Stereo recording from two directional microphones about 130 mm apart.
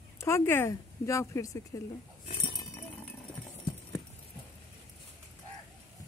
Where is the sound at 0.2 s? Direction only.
20° left (ahead or behind).